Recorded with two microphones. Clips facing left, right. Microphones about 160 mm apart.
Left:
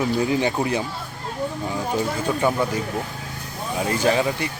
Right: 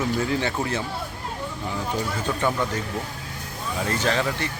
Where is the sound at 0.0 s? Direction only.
15° left (ahead or behind).